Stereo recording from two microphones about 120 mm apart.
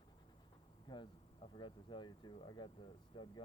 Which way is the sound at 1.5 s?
40° left (ahead or behind).